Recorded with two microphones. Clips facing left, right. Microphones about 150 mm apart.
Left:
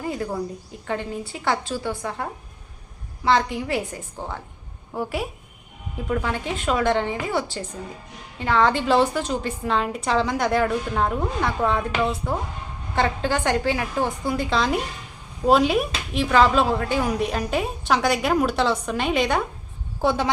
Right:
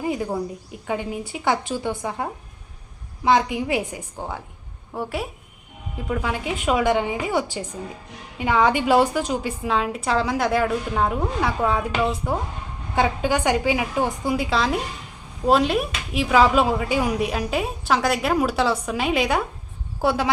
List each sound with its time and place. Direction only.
0.0 s a woman's voice: 15° right (ahead or behind)
3.2 s a woman's voice: 15° right (ahead or behind)
4.9 s a woman's voice: centre (ahead or behind)